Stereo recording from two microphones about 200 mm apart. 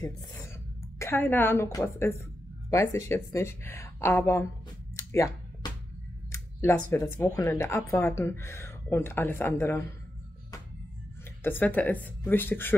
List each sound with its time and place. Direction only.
0.0 s a woman's voice: 15° left (ahead or behind)
4.9 s a sound: 15° left (ahead or behind)
7.2 s a woman's voice: 15° left (ahead or behind)
11.4 s a woman's voice: 10° left (ahead or behind)